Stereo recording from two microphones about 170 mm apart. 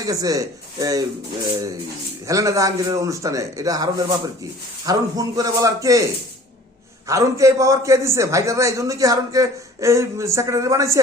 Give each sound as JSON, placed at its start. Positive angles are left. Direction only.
{"t": 0.0, "sound": "a man's voice", "side_deg": -20}
{"t": 7.1, "sound": "a man's voice", "side_deg": -20}